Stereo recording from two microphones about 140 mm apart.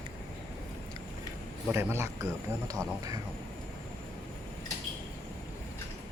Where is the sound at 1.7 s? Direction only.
20° right (ahead or behind).